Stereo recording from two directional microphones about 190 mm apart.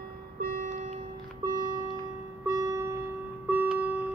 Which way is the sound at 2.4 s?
15° right (ahead or behind).